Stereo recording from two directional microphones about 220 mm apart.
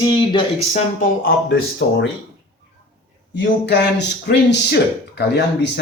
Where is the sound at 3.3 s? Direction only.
50° left (ahead or behind).